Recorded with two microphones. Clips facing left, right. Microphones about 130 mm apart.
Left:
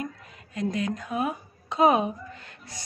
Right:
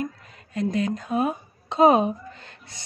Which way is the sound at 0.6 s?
30° right (ahead or behind).